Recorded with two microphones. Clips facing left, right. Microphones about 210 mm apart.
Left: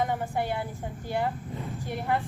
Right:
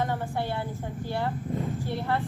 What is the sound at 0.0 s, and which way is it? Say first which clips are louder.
A woman's voice: left 1 dB; 15° left (ahead or behind).